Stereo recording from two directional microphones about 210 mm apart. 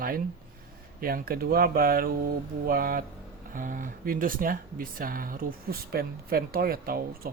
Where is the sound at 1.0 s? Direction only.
45° right (ahead or behind).